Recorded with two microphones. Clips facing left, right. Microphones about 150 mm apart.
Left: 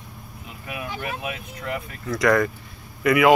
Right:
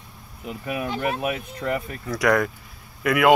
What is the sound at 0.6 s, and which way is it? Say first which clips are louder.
Speech: right 6 dB; 30° right (ahead or behind).